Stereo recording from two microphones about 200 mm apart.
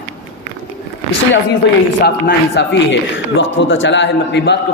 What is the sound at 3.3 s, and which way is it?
A man's voice, 70° left (ahead or behind).